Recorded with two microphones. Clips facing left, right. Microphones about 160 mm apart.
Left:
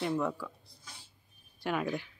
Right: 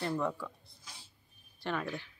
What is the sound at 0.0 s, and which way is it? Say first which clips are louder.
Speech: left 2 dB; 5° left (ahead or behind).